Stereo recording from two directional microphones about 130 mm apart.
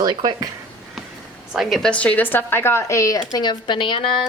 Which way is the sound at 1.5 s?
Centre (ahead or behind).